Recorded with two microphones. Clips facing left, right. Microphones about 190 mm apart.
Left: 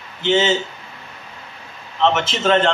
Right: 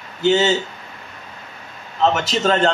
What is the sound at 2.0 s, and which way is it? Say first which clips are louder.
Speech: even; 40° right (ahead or behind).